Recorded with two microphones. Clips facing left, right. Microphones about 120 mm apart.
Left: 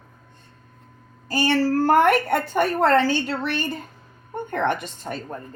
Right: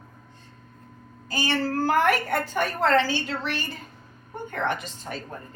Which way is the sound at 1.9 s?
55° left (ahead or behind).